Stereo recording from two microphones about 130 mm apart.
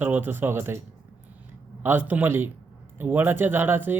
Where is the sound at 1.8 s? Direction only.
15° right (ahead or behind).